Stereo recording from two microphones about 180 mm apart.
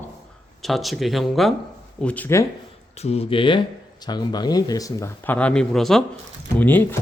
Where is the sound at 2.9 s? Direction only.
35° left (ahead or behind); by 7.0 s 10° left (ahead or behind).